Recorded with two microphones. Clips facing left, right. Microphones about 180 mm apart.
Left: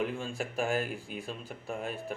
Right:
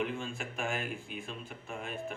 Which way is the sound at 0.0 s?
35° left (ahead or behind).